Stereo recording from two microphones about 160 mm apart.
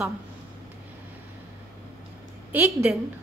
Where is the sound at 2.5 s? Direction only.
10° right (ahead or behind).